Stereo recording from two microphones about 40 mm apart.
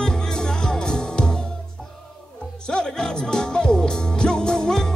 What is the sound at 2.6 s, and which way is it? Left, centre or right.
Music, left.